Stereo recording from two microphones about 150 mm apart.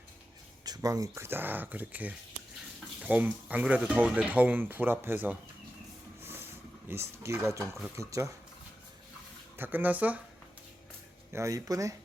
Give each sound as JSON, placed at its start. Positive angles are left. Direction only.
{"t": 0.6, "sound": "speech", "side_deg": -25}
{"t": 6.2, "sound": "a sound", "side_deg": -15}
{"t": 7.9, "sound": "speech", "side_deg": -20}
{"t": 9.6, "sound": "speech", "side_deg": -10}
{"t": 11.3, "sound": "speech", "side_deg": -20}